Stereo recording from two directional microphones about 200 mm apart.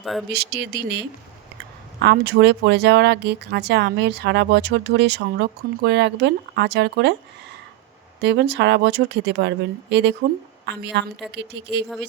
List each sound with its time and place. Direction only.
0.0 s speech: centre (ahead or behind)
0.3 s speech: 55° right (ahead or behind)
8.2 s speech: 60° right (ahead or behind)